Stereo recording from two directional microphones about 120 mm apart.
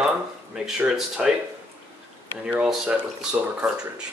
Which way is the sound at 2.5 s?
10° right (ahead or behind).